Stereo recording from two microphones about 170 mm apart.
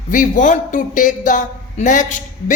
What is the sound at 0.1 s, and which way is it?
A man's voice, 50° left (ahead or behind).